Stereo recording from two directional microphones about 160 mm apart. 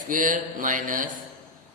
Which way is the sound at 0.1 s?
55° right (ahead or behind).